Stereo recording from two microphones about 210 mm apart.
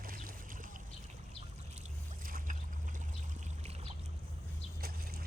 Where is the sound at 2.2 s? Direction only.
40° right (ahead or behind).